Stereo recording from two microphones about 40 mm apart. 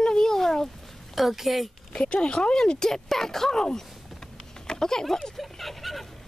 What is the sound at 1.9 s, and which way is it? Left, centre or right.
Speech, left.